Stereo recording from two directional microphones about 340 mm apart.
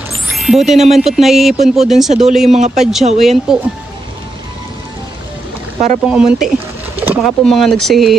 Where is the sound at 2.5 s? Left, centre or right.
Centre.